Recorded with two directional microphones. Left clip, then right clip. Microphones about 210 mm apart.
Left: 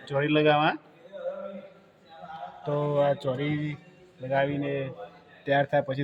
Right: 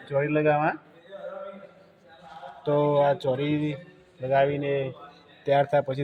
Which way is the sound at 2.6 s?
10° right (ahead or behind).